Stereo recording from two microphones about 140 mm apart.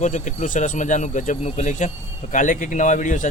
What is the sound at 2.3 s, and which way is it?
Speech, 70° left (ahead or behind).